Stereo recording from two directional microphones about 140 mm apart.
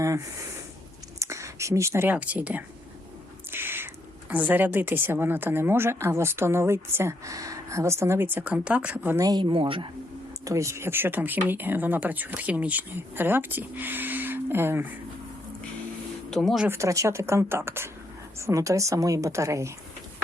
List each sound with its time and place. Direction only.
1.2 s speech: 20° right (ahead or behind)
3.5 s a sound: 15° right (ahead or behind)
4.3 s speech: 10° right (ahead or behind); by 9.8 s 40° right (ahead or behind)
10.4 s speech: 20° right (ahead or behind)
16.3 s speech: centre (ahead or behind)
16.6 s a woman's voice: 20° right (ahead or behind)